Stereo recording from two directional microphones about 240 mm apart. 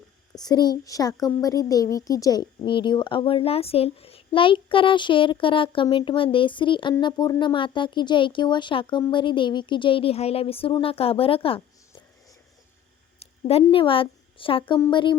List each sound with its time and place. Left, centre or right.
0.4 s speech: centre
13.1 s speech: left